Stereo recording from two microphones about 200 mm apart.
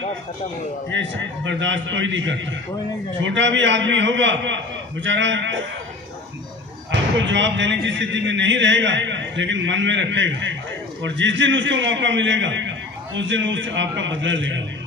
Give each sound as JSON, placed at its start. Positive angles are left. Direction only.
{"t": 0.9, "sound": "a man's voice", "side_deg": -65}
{"t": 6.9, "sound": "a man's voice", "side_deg": -65}